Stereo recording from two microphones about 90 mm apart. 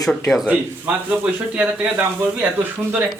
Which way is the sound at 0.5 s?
15° right (ahead or behind).